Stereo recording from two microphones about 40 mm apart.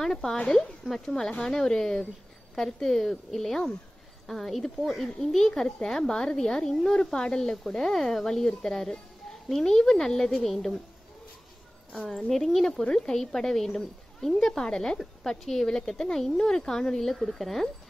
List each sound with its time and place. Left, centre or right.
0.0 s a woman's voice: centre
12.3 s a woman's voice: centre